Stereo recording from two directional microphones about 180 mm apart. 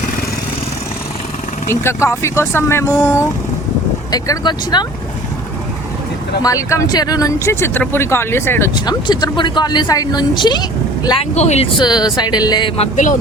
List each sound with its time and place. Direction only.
1.7 s speech: 15° left (ahead or behind)
4.1 s speech: 20° left (ahead or behind)
6.4 s speech: 20° left (ahead or behind)
8.7 s speech: 25° left (ahead or behind)
11.3 s speech: 40° left (ahead or behind)
11.8 s speech: 25° left (ahead or behind); by 13.1 s 40° left (ahead or behind)